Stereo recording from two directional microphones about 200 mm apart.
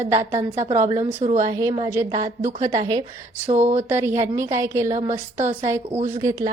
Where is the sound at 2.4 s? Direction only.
35° right (ahead or behind).